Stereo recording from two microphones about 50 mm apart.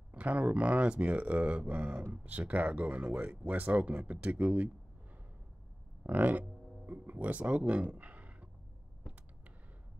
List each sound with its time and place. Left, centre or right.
0.1 s speech: right
6.0 s speech: right